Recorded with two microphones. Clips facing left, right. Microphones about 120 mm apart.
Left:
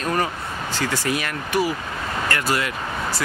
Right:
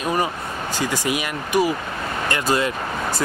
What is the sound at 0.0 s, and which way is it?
Speech, 15° right (ahead or behind).